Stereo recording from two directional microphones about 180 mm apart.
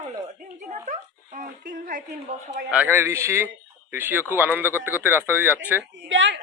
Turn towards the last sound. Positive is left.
turn(degrees=-90)